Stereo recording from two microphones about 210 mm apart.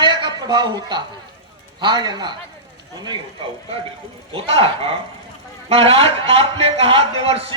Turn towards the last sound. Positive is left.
turn(degrees=-30)  # may be behind; listen again after turning